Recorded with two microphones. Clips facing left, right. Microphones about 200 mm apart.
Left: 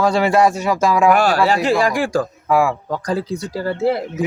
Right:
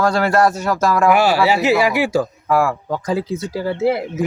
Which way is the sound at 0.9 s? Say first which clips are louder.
Even; centre (ahead or behind).